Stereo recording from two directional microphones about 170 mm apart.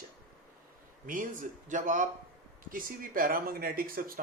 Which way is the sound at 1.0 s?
50° right (ahead or behind).